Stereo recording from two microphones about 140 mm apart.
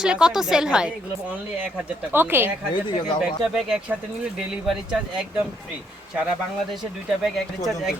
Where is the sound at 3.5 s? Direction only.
5° right (ahead or behind).